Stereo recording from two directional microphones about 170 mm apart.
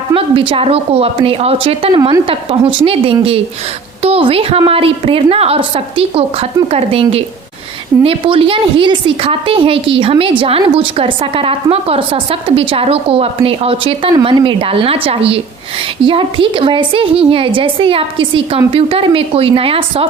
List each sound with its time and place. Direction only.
0.1 s speech: 30° right (ahead or behind)
2.0 s a woman's voice: 20° right (ahead or behind)
2.2 s speech: 30° right (ahead or behind)